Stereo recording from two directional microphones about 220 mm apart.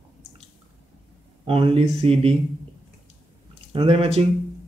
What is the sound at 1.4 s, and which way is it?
Speech, 25° right (ahead or behind).